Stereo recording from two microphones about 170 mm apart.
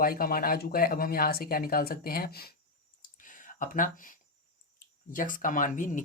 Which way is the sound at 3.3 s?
50° left (ahead or behind).